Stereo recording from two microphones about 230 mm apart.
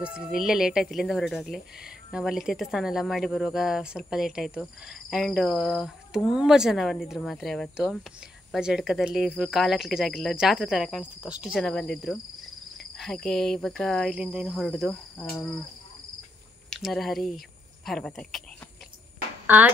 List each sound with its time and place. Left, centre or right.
0.0 s speech: centre
16.7 s speech: centre
19.4 s speech: centre